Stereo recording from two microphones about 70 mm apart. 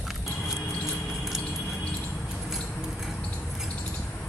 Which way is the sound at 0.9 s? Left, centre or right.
Centre.